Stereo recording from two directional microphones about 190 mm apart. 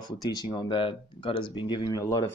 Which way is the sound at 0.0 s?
20° left (ahead or behind).